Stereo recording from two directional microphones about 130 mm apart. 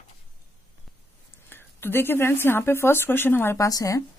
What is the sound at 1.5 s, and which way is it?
Speech, 15° left (ahead or behind).